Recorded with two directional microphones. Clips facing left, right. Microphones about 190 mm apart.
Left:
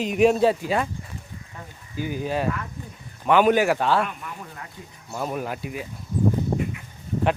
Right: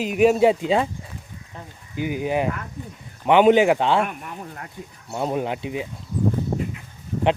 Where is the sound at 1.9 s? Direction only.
15° right (ahead or behind).